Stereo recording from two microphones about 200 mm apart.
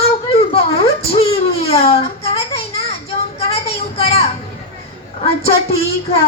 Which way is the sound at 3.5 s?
30° left (ahead or behind).